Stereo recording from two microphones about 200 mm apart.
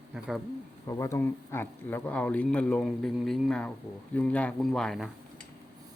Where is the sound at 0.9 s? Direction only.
15° left (ahead or behind).